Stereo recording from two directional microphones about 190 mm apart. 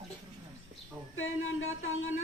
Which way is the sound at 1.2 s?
90° left.